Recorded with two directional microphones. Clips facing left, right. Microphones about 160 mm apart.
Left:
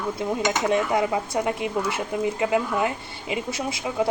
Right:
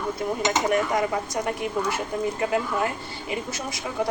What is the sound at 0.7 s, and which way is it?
A woman's voice, 25° left (ahead or behind).